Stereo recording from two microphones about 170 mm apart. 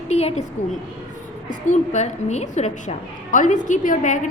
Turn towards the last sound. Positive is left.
turn(degrees=50)  # may be behind; listen again after turning